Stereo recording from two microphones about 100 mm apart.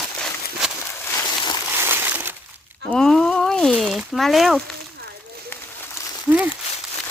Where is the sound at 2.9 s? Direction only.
5° left (ahead or behind).